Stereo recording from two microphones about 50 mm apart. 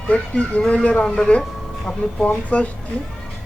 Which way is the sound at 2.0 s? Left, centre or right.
Left.